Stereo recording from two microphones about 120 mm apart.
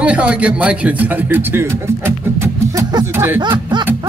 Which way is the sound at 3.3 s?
40° right (ahead or behind).